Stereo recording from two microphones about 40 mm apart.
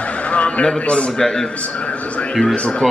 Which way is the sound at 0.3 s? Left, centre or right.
Left.